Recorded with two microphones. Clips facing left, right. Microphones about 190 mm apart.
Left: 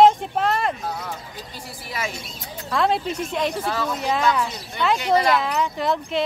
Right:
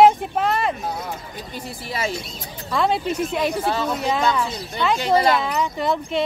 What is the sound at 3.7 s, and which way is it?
Speech, 25° right (ahead or behind).